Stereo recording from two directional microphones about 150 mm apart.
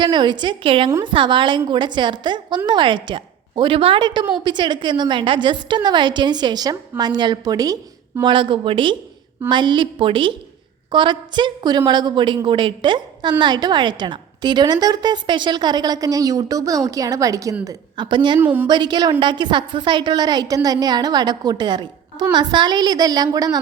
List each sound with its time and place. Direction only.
0.0 s a woman's voice: 30° right (ahead or behind)
18.3 s a woman's voice: 10° right (ahead or behind)
18.7 s a woman's voice: 30° right (ahead or behind)